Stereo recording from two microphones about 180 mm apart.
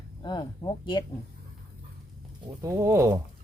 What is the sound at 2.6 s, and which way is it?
Speech, 15° right (ahead or behind).